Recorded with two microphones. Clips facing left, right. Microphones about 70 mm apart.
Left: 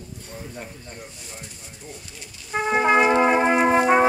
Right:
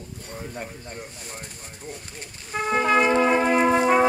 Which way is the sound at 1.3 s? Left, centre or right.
Right.